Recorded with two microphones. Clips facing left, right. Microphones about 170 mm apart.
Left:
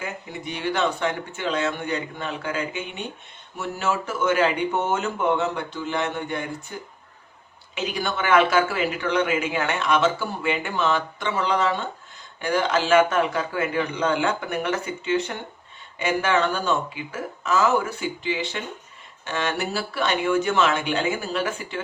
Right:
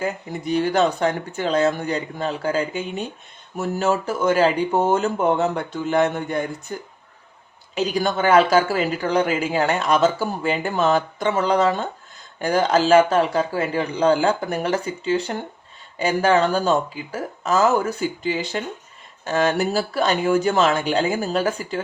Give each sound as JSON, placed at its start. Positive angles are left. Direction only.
{"t": 0.0, "sound": "speech", "side_deg": -40}
{"t": 7.8, "sound": "speech", "side_deg": -40}